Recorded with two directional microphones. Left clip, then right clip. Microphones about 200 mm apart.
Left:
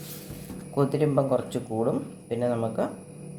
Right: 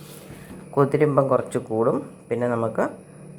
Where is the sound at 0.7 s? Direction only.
25° right (ahead or behind).